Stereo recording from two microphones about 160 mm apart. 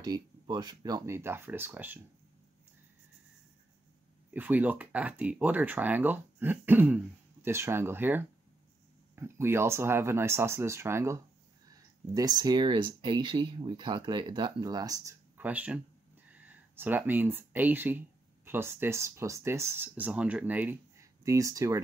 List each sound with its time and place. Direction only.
0.0 s speech: 25° right (ahead or behind)
4.3 s speech: 10° right (ahead or behind)
15.3 s speech: 10° right (ahead or behind)